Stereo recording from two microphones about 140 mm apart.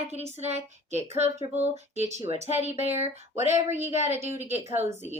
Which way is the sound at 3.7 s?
15° right (ahead or behind).